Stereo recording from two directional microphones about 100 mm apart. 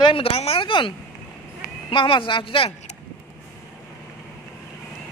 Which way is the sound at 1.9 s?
60° left (ahead or behind).